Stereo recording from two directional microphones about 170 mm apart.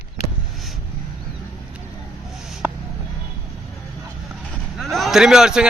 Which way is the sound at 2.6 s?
10° right (ahead or behind).